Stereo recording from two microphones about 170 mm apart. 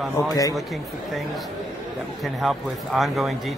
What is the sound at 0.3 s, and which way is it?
Speech, 20° left (ahead or behind).